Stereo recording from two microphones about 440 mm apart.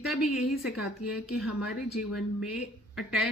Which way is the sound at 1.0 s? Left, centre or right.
Centre.